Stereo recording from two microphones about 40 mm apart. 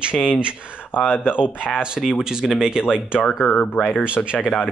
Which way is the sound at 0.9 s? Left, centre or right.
Left.